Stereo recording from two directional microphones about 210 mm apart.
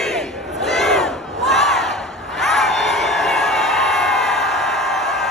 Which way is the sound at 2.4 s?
Centre (ahead or behind).